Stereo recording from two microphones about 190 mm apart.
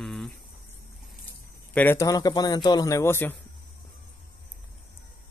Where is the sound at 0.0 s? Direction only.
Centre (ahead or behind).